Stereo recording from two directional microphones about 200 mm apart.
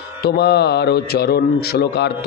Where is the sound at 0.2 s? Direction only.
55° left (ahead or behind).